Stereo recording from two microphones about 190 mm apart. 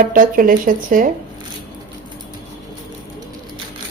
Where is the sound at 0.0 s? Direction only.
45° right (ahead or behind).